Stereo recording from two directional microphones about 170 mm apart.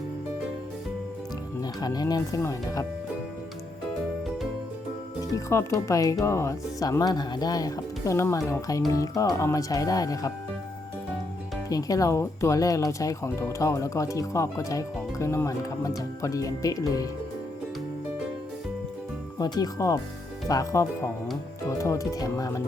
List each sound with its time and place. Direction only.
1.6 s speech: 25° left (ahead or behind)
5.3 s speech: 20° left (ahead or behind)
11.7 s speech: 20° left (ahead or behind)
19.4 s speech: 25° left (ahead or behind)